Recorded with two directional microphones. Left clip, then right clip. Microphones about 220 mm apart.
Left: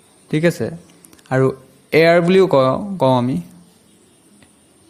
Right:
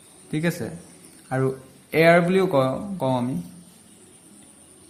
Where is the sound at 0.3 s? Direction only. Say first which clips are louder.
Left 9 dB; 40° left (ahead or behind).